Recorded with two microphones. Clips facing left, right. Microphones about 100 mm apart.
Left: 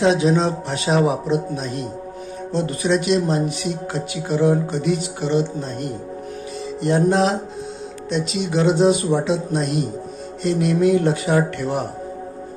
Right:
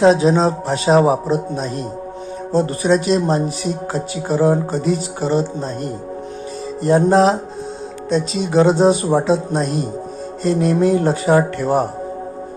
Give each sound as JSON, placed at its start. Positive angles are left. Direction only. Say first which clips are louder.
{"t": 0.0, "sound": "speech", "louder": "right 4 dB", "side_deg": -35}
{"t": 7.0, "sound": "speech", "louder": "right 3 dB", "side_deg": -40}